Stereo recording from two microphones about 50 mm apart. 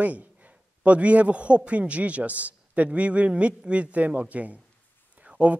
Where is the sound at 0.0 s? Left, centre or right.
Right.